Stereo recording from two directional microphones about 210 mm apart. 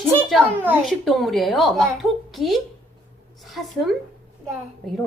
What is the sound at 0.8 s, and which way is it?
A woman's voice, centre (ahead or behind).